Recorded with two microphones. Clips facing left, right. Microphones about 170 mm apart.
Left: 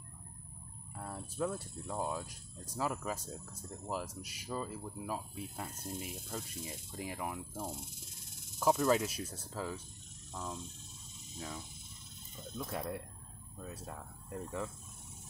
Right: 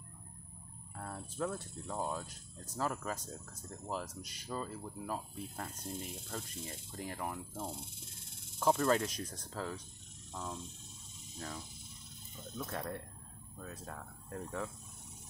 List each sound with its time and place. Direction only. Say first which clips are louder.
0.9 s speech: left 1 dB; 10° left (ahead or behind)
12.6 s speech: left 2 dB; 5° left (ahead or behind)